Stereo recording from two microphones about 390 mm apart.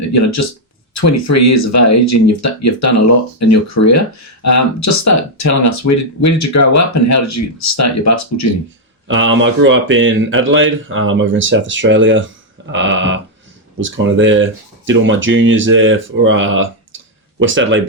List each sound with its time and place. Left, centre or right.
0.1 s speech: left
9.0 s speech: right